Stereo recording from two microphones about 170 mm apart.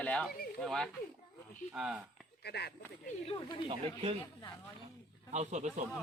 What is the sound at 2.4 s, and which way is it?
Speech, 75° left (ahead or behind).